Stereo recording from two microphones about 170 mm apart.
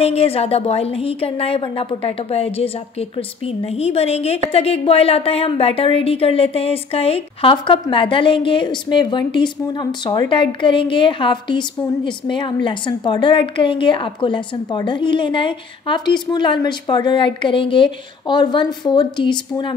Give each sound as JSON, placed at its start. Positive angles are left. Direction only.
{"t": 0.0, "sound": "speech", "side_deg": 35}